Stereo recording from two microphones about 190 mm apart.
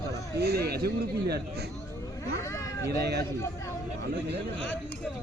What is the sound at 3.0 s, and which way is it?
Speech, 60° right (ahead or behind).